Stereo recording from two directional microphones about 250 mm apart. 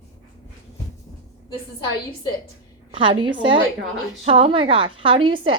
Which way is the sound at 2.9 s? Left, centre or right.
Centre.